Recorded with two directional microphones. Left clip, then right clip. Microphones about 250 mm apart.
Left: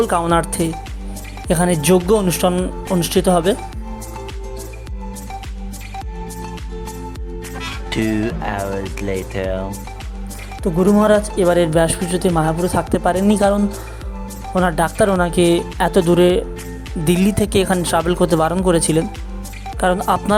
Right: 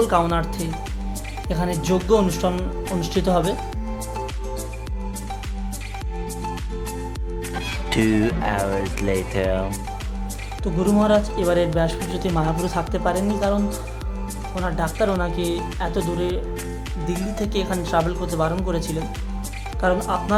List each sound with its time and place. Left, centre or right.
0.1 s speech: left
7.6 s speech: centre
10.6 s speech: left
13.1 s speech: left
14.6 s speech: left